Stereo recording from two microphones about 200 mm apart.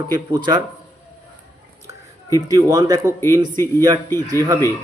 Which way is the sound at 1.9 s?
15° right (ahead or behind).